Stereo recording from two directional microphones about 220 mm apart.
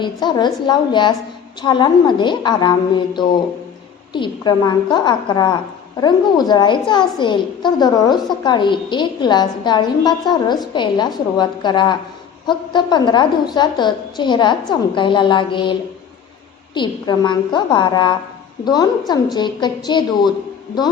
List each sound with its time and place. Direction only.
0.0 s a woman's voice: 20° left (ahead or behind)